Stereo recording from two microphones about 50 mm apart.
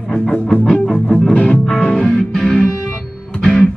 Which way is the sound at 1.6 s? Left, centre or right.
Centre.